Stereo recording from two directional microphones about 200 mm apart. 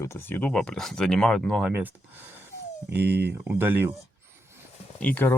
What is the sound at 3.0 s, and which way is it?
Speech, 55° right (ahead or behind).